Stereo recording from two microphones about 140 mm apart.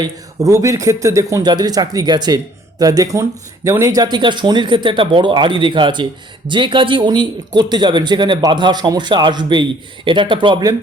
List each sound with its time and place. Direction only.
0.0 s speech: 20° right (ahead or behind)